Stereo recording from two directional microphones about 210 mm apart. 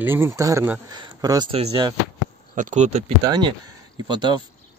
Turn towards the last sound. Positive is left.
turn(degrees=-20)  # may be behind; listen again after turning